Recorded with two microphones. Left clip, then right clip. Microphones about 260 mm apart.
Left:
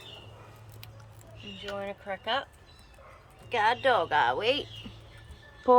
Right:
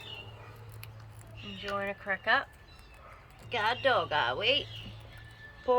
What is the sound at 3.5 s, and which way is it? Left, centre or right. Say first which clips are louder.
Speech: left 3 dB; centre.